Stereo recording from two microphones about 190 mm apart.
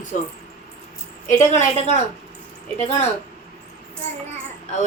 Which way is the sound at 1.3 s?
40° left (ahead or behind).